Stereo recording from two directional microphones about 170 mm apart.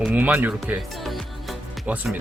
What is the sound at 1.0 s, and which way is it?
Music, centre (ahead or behind).